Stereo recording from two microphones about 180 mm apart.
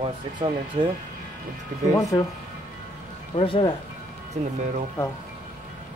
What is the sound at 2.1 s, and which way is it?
Speech, 20° left (ahead or behind).